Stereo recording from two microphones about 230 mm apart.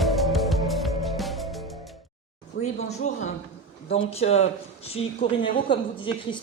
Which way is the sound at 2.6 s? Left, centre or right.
Left.